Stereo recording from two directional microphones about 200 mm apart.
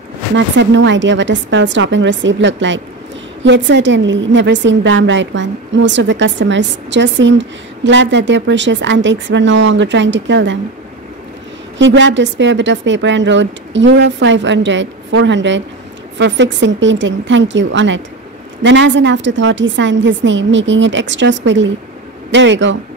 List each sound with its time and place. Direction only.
0.6 s a woman's voice: 65° right (ahead or behind)
11.8 s a woman's voice: 65° right (ahead or behind)